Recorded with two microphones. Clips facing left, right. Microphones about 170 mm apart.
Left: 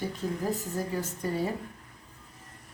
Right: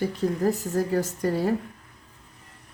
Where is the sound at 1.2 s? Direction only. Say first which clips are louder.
Right 3 dB; 80° right.